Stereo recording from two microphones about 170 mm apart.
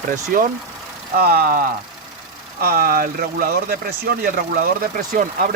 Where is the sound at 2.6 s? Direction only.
60° right (ahead or behind).